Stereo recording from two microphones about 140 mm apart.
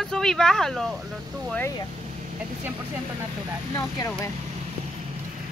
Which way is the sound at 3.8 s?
20° left (ahead or behind).